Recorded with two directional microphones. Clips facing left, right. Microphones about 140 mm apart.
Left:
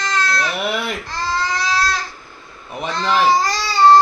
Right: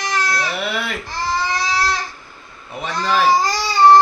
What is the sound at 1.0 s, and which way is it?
Baby cry, 15° right (ahead or behind).